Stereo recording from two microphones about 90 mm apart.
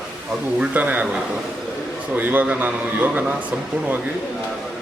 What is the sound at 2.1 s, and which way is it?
A man's voice, 20° right (ahead or behind).